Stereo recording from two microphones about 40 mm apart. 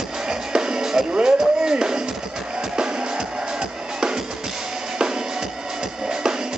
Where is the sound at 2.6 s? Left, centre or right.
Centre.